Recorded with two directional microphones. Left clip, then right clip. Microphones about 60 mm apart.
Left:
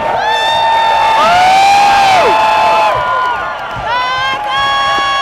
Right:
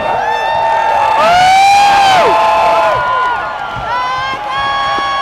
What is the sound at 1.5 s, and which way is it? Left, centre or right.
Siren, centre.